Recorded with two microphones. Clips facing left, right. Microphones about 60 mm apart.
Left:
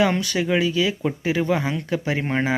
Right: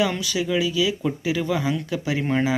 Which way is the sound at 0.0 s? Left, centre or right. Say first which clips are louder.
Left 3 dB; left.